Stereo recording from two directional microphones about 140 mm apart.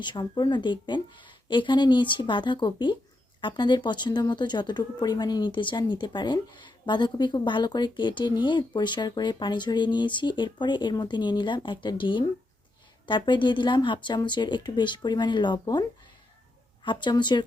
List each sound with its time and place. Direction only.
0.0 s speech: 30° left (ahead or behind)
16.8 s speech: 35° left (ahead or behind)